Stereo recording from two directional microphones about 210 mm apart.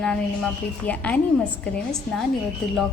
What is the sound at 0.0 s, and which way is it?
A woman's voice, 5° left (ahead or behind).